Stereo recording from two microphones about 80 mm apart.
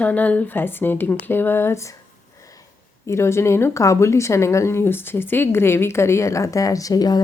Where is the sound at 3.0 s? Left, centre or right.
Left.